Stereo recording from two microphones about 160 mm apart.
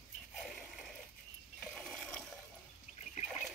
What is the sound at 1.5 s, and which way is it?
Ratchet, 5° left (ahead or behind).